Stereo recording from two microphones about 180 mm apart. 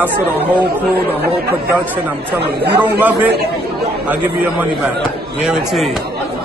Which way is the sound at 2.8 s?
10° right (ahead or behind).